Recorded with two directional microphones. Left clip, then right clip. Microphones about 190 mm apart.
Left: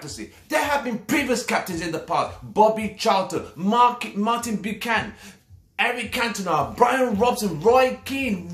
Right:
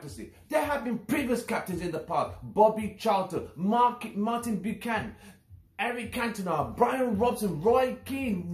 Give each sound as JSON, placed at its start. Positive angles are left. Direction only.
{"t": 0.0, "sound": "speech", "side_deg": 5}